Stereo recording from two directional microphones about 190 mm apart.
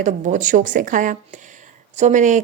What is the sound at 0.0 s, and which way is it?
A woman's voice, 40° right (ahead or behind).